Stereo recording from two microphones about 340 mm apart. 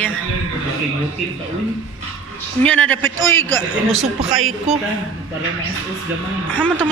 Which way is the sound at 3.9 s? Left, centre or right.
Right.